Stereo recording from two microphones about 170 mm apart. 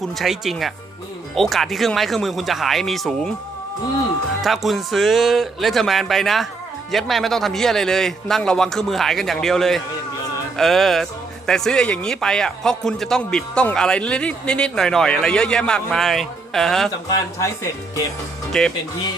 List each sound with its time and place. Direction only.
0.0 s speech: centre (ahead or behind)
4.4 s speech: centre (ahead or behind)
17.1 s speech: 15° left (ahead or behind)
18.5 s speech: 5° left (ahead or behind)